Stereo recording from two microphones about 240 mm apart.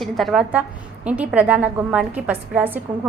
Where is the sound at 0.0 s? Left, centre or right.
Centre.